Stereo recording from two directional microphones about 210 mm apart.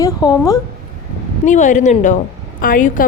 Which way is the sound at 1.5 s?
35° left (ahead or behind).